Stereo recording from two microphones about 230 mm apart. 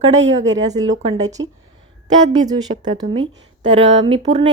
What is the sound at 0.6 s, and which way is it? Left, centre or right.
A woman's voice, centre.